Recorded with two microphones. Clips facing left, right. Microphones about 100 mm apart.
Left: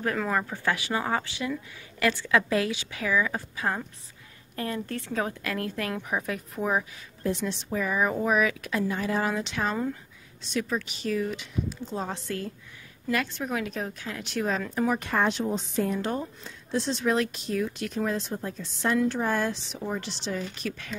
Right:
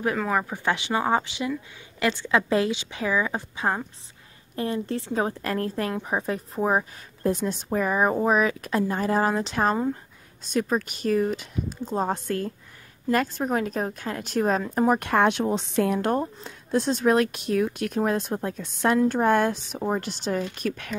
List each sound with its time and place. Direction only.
0.0 s a woman's voice: 10° right (ahead or behind); by 15.0 s 45° right (ahead or behind)
15.0 s speech: 65° right (ahead or behind)
16.1 s speech: 50° right (ahead or behind)